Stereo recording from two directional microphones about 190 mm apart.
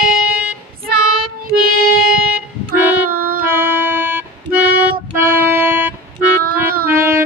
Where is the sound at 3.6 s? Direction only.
10° right (ahead or behind).